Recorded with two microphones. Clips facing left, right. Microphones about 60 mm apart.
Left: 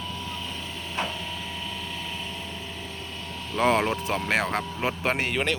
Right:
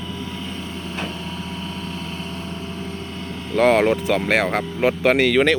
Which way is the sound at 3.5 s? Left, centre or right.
Right.